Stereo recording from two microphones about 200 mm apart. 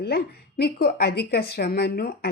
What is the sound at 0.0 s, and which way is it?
A woman's voice, 55° left (ahead or behind).